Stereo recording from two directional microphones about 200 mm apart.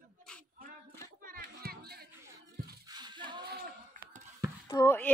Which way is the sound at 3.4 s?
40° right (ahead or behind).